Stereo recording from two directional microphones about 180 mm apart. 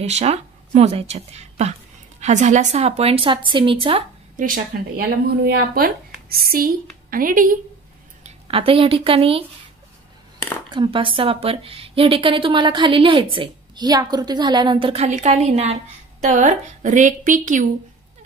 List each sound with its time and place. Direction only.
0.0 s a woman's voice: 35° right (ahead or behind)
4.9 s a woman's voice: 55° right (ahead or behind)
8.2 s speech: 35° right (ahead or behind)
10.7 s a woman's voice: 30° right (ahead or behind); by 17.6 s 45° right (ahead or behind)